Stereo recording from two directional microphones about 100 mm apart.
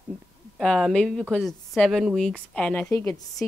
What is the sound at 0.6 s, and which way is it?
A woman's voice, 5° left (ahead or behind).